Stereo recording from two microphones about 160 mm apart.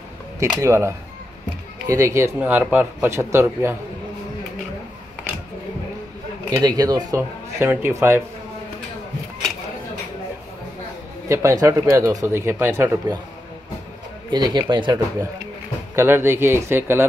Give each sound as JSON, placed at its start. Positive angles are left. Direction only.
{"t": 0.4, "sound": "speech", "side_deg": -20}
{"t": 6.5, "sound": "speech", "side_deg": -25}
{"t": 11.2, "sound": "speech", "side_deg": -20}
{"t": 14.3, "sound": "speech", "side_deg": -25}
{"t": 16.0, "sound": "speech", "side_deg": -15}